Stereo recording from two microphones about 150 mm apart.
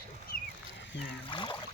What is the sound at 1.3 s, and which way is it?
Speech, 30° left (ahead or behind).